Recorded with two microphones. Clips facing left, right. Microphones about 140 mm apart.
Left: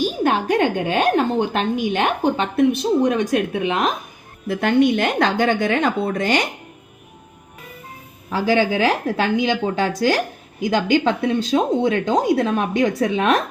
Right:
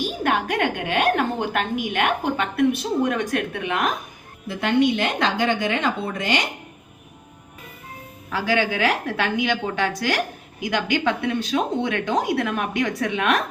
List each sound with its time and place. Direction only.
0.2 s a woman's voice: 25° left (ahead or behind)
4.4 s a woman's voice: 45° left (ahead or behind)
8.3 s a woman's voice: 30° left (ahead or behind)